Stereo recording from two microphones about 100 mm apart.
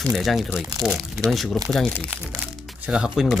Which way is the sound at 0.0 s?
Centre (ahead or behind).